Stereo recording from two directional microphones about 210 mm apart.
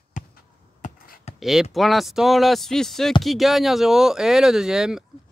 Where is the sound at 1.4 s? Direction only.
Centre (ahead or behind).